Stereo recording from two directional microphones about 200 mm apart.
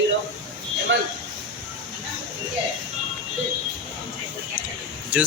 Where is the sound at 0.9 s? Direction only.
65° right (ahead or behind).